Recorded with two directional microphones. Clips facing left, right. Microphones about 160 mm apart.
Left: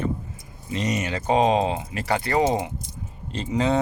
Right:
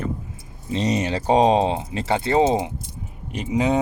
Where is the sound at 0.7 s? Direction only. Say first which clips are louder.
Right 4 dB; 30° right (ahead or behind).